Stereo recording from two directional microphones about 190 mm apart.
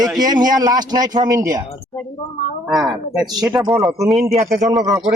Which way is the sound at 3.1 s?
20° right (ahead or behind).